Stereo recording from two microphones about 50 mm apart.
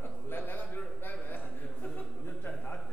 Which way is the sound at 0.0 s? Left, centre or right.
Left.